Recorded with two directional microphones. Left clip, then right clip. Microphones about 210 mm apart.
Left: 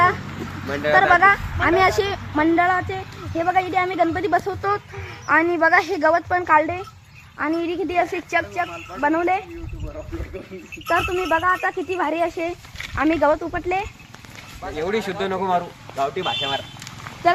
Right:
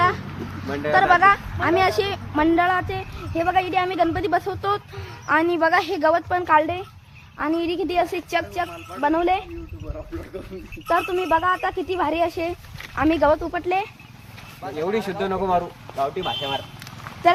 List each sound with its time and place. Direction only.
0.7 s speech: 50° left (ahead or behind)
0.9 s speech: 25° left (ahead or behind); by 8.2 s centre (ahead or behind)
8.3 s speech: 15° left (ahead or behind)
11.0 s speech: 5° right (ahead or behind)
14.8 s speech: 25° right (ahead or behind)
16.0 s speech: 5° right (ahead or behind)